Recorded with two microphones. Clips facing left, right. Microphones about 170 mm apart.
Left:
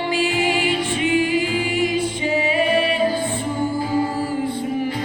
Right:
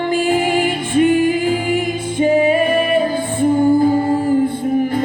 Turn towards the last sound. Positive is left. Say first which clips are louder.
# right 8 dB
turn(degrees=-50)  # may be behind; listen again after turning